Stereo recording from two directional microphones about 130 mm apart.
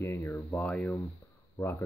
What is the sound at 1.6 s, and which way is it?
Speech, 20° left (ahead or behind).